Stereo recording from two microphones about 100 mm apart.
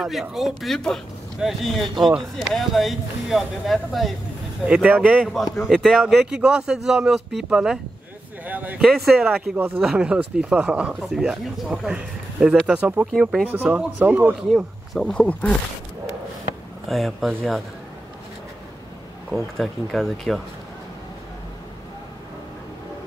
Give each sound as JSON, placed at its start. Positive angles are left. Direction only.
{"t": 0.0, "sound": "speech", "side_deg": -5}
{"t": 4.6, "sound": "speech", "side_deg": -10}
{"t": 5.3, "sound": "speech", "side_deg": 0}
{"t": 8.8, "sound": "speech", "side_deg": 0}
{"t": 11.0, "sound": "speech", "side_deg": 0}
{"t": 14.3, "sound": "speech", "side_deg": 0}
{"t": 16.8, "sound": "speech", "side_deg": 0}
{"t": 19.3, "sound": "speech", "side_deg": 0}